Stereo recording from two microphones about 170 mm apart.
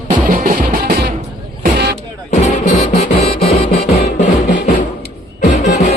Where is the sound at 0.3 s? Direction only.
55° right (ahead or behind).